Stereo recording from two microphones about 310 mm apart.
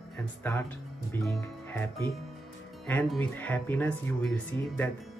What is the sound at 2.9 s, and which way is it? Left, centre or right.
Speech, centre.